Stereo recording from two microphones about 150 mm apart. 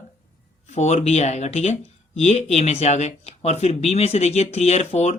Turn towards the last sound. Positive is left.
turn(degrees=45)  # may be behind; listen again after turning